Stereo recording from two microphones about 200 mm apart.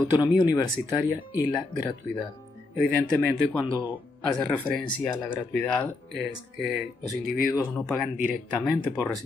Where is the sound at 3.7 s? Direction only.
10° right (ahead or behind).